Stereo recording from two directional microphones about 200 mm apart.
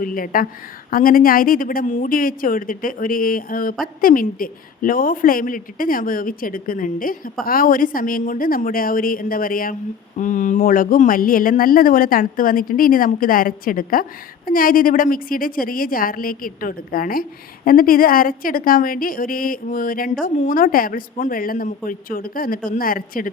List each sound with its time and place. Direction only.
0.0 s speech: 45° left (ahead or behind)